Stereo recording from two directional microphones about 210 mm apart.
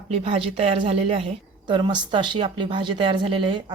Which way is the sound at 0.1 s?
25° right (ahead or behind).